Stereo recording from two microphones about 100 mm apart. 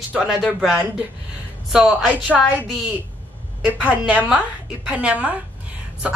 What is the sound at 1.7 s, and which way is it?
Speech, 5° right (ahead or behind).